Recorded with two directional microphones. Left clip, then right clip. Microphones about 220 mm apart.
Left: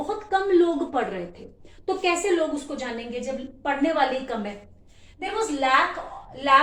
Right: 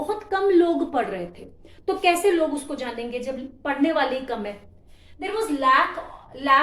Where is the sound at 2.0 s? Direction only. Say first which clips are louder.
Right 4 dB; 45° right (ahead or behind).